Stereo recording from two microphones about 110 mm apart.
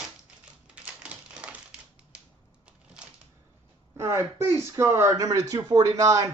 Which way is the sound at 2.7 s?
10° right (ahead or behind).